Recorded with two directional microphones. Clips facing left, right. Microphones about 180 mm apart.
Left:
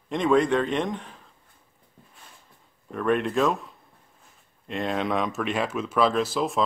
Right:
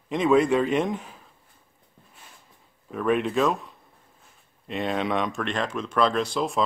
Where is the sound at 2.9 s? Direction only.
Centre (ahead or behind).